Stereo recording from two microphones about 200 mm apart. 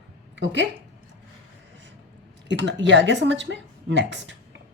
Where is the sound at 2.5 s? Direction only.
60° right (ahead or behind).